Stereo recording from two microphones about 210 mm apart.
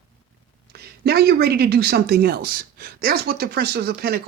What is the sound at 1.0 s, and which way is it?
Speech, 50° right (ahead or behind).